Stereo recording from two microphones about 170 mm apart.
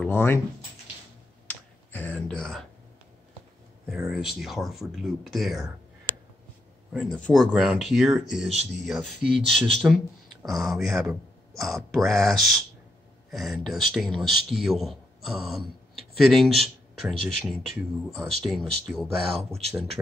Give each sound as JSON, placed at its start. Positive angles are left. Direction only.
{"t": 0.0, "sound": "speech", "side_deg": 15}
{"t": 1.5, "sound": "computer keyboard", "side_deg": 10}
{"t": 3.9, "sound": "a man's voice", "side_deg": 0}
{"t": 6.9, "sound": "a man's voice", "side_deg": 0}